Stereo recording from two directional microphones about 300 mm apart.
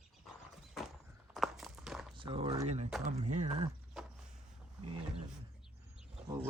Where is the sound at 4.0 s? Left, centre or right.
Centre.